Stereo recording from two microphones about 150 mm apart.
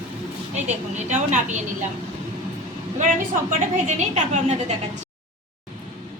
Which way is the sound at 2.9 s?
55° right (ahead or behind).